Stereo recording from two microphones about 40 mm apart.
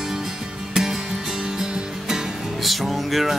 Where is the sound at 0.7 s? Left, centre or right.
Centre.